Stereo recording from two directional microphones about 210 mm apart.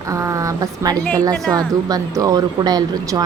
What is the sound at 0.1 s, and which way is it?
A woman's voice, 15° right (ahead or behind).